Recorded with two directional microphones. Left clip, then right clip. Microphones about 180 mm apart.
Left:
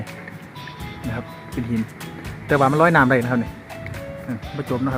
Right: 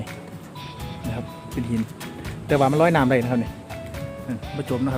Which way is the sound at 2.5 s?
Centre (ahead or behind).